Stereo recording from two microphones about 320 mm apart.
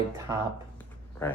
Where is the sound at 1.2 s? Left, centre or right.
Centre.